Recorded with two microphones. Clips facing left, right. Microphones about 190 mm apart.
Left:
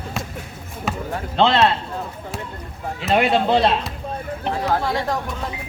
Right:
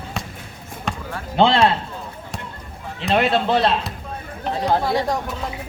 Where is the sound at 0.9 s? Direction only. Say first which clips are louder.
Left 2 dB; 5° left (ahead or behind).